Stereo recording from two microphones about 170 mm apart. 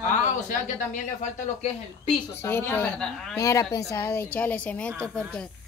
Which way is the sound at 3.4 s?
20° left (ahead or behind).